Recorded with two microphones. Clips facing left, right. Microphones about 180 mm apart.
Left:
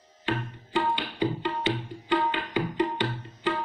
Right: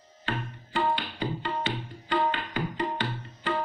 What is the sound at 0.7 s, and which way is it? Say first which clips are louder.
Tabla: left 1 dB; 15° left (ahead or behind).